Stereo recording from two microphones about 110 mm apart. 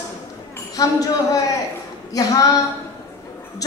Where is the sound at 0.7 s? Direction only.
35° left (ahead or behind).